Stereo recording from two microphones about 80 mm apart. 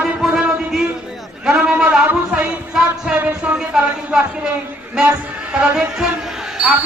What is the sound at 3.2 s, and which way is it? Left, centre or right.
A man's voice, centre.